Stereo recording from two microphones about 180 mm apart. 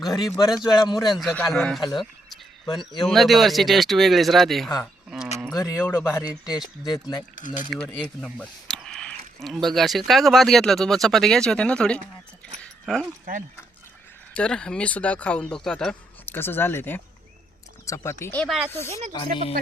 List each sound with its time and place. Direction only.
0.1 s speech: 20° left (ahead or behind)
1.1 s speech: centre (ahead or behind)
5.1 s a sound: centre (ahead or behind)
5.5 s speech: 20° left (ahead or behind)
7.3 s speech: 45° left (ahead or behind)
8.2 s a sound: 5° left (ahead or behind)
10.1 s speech: centre (ahead or behind)
12.6 s a sound: centre (ahead or behind)
14.3 s speech: 5° left (ahead or behind)
18.9 s speech: 35° right (ahead or behind)
19.1 s speech: 30° left (ahead or behind)